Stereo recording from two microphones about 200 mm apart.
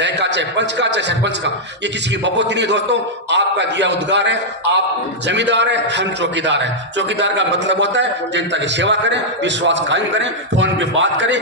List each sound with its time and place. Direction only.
0.0 s a man's voice: 60° right (ahead or behind)